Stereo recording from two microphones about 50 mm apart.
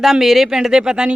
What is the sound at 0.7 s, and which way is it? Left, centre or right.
Speech, centre.